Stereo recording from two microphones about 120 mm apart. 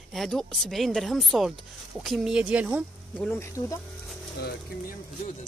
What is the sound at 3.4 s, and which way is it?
Speech, 25° left (ahead or behind).